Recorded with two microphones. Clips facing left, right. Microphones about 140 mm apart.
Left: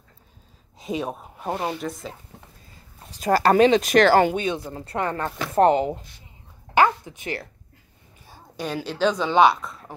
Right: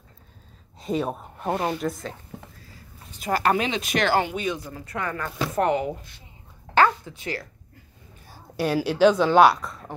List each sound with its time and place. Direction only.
0.7 s a woman's voice: centre (ahead or behind)
3.1 s speech: 35° left (ahead or behind)
4.4 s speech: 25° left (ahead or behind)
6.7 s a sound: 15° left (ahead or behind)
8.5 s a woman's voice: 10° right (ahead or behind)